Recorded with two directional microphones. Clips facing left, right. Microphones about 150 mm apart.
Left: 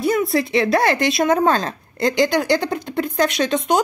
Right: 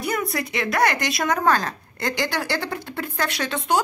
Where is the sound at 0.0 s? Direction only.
25° left (ahead or behind).